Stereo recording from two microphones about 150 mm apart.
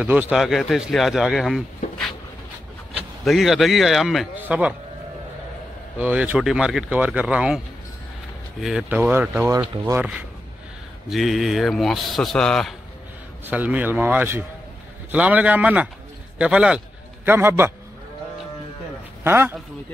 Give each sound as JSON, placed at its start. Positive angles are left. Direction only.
{"t": 0.0, "sound": "speech", "side_deg": -10}
{"t": 3.3, "sound": "speech", "side_deg": 0}
{"t": 5.9, "sound": "speech", "side_deg": -10}
{"t": 9.5, "sound": "speech", "side_deg": -25}
{"t": 9.9, "sound": "speech", "side_deg": -10}
{"t": 13.5, "sound": "a man's voice", "side_deg": -10}
{"t": 19.2, "sound": "a man's voice", "side_deg": -15}